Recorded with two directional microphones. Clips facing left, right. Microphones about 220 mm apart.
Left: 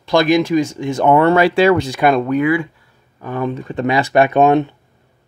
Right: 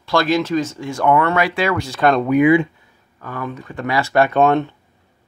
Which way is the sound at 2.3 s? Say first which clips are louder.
Right 3 dB; 20° right (ahead or behind).